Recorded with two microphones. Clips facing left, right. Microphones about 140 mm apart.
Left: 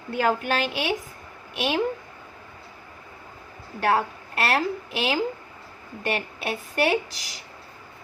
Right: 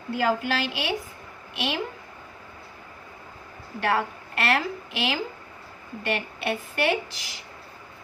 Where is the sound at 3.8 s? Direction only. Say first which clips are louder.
Left 2 dB; 40° left (ahead or behind).